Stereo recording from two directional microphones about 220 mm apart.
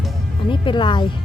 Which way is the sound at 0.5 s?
20° left (ahead or behind).